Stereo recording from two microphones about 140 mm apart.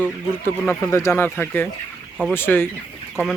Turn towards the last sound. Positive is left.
turn(degrees=15)  # may be behind; listen again after turning